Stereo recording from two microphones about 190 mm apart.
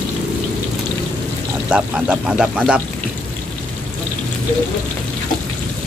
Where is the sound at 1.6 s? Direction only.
5° right (ahead or behind).